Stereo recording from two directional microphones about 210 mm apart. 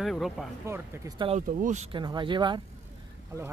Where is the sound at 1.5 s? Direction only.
35° right (ahead or behind).